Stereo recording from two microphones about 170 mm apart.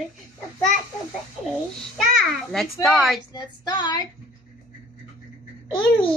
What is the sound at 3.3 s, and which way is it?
Speech, 25° left (ahead or behind).